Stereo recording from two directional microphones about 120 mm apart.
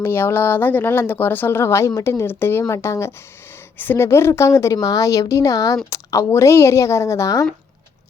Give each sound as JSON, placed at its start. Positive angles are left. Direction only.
{"t": 0.0, "sound": "a woman's voice", "side_deg": 20}